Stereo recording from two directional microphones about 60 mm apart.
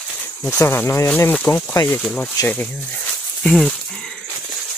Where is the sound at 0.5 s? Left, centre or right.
Left.